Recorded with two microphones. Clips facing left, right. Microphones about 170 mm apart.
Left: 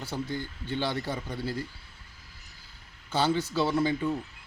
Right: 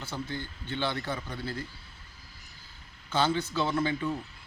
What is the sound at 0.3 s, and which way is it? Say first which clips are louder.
Speech: left 3 dB; 10° left (ahead or behind).